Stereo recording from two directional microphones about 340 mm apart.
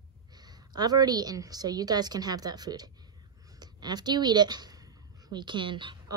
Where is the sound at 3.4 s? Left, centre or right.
Centre.